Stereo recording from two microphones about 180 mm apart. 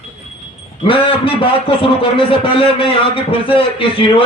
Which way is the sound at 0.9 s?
30° left (ahead or behind).